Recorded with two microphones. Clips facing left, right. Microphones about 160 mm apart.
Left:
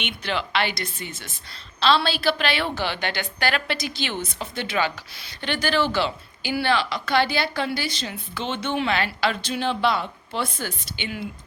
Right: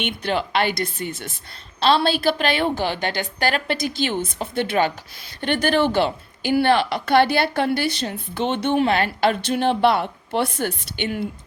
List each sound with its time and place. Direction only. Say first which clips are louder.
0.0 s a woman's voice: right 5 dB; 45° right (ahead or behind)